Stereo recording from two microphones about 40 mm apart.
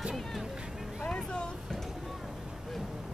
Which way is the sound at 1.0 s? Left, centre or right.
Left.